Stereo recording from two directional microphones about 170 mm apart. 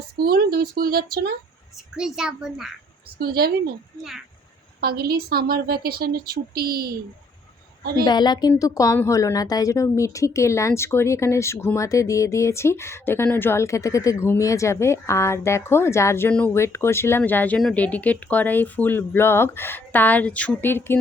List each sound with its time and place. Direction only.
0.2 s a woman's voice: 60° right (ahead or behind)
2.0 s a child's voice: 5° right (ahead or behind)
3.2 s a woman's voice: 65° right (ahead or behind)
4.8 s a woman's voice: 65° right (ahead or behind)
8.0 s a woman's voice: 25° left (ahead or behind)